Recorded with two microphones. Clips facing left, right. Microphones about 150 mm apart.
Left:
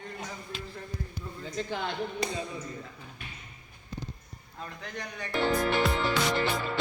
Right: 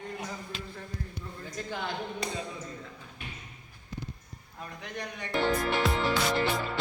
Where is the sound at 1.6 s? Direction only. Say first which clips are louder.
Left 3 dB; centre (ahead or behind).